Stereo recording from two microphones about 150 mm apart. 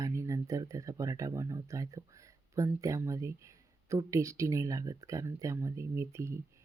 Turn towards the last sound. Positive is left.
turn(degrees=-20)  # may be behind; listen again after turning